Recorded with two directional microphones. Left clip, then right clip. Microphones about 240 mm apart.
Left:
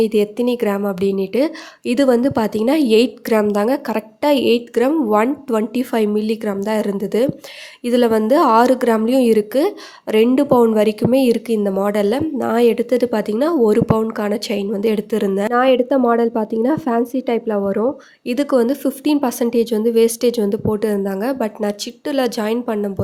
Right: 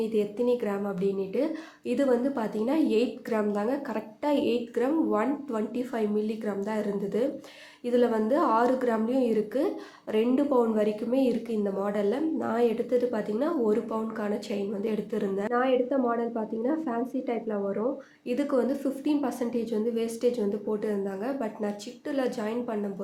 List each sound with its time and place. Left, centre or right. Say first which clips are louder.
0.0 s a woman's voice: left 11 dB; left